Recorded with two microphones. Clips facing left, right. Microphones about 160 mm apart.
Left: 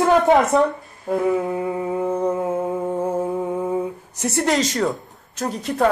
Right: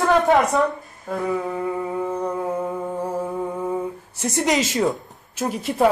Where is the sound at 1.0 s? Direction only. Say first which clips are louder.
Left 4 dB; 15° left (ahead or behind).